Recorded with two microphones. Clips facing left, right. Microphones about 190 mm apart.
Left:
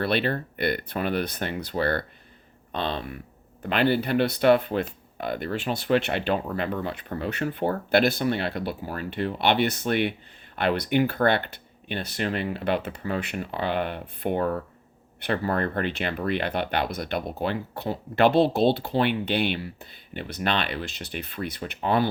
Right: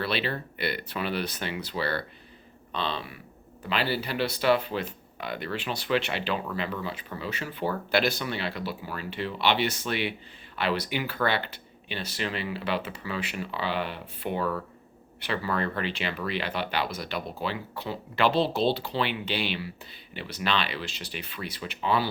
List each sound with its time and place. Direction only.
0.0 s speech: 50° left (ahead or behind)